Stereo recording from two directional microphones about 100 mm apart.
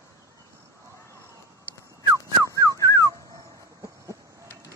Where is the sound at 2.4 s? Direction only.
35° left (ahead or behind).